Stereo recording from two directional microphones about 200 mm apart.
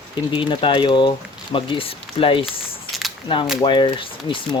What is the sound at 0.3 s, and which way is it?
Speech, 25° left (ahead or behind).